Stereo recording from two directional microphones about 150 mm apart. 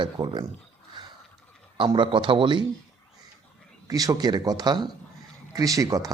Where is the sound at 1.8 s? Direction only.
35° right (ahead or behind).